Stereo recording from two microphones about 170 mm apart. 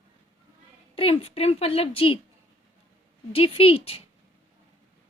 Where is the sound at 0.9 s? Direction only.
35° left (ahead or behind).